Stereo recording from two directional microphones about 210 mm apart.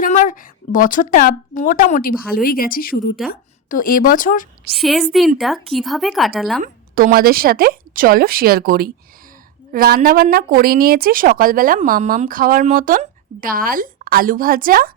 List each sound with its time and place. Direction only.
0.0 s a woman's voice: 40° left (ahead or behind)
4.7 s speech: centre (ahead or behind)
6.6 s speech: 40° right (ahead or behind)